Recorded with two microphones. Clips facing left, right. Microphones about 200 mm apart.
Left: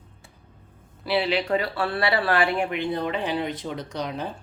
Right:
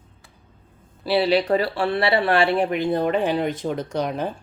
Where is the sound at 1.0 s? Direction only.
35° right (ahead or behind); by 4.3 s 50° right (ahead or behind).